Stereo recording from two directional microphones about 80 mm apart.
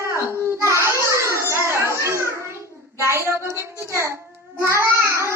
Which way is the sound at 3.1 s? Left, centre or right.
Right.